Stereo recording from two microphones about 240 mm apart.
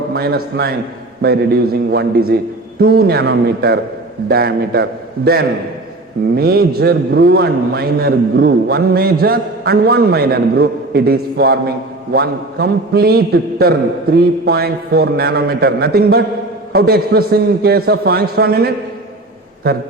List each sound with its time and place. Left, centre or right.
0.1 s a man's voice: right